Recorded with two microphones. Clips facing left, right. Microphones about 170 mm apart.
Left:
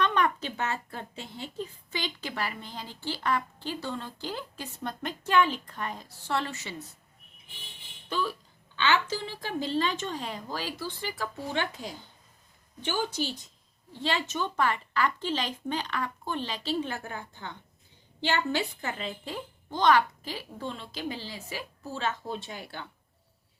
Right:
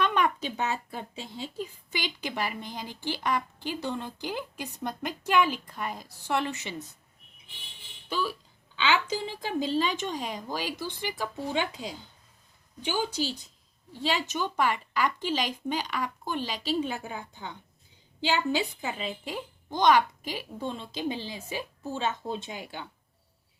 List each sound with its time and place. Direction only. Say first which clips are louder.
0.0 s speech: even; 10° right (ahead or behind)
8.1 s speech: even; 10° right (ahead or behind)